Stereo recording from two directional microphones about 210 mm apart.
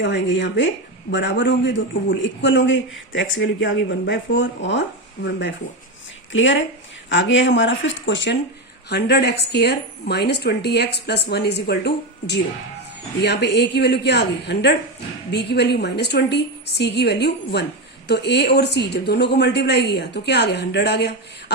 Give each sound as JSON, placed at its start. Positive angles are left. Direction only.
{"t": 0.0, "sound": "speech", "side_deg": 55}